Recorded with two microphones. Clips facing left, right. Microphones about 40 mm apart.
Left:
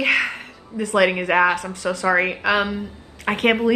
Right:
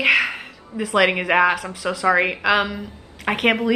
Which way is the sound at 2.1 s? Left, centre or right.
Right.